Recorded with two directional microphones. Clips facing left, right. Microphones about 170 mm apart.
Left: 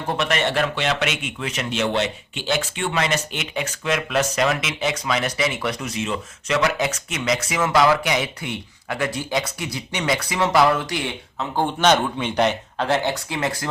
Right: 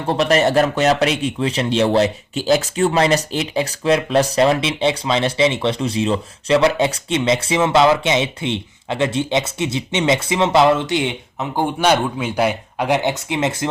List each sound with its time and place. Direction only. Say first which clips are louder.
0.1 s a man's voice: right 7 dB; 35° right (ahead or behind)